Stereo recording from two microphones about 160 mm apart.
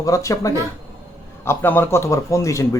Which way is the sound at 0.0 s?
20° left (ahead or behind).